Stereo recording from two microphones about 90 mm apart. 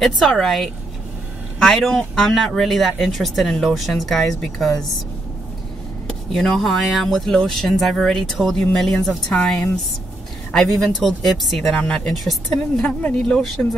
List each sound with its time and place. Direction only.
0.0 s speech: 5° left (ahead or behind)
6.0 s speech: 5° left (ahead or behind)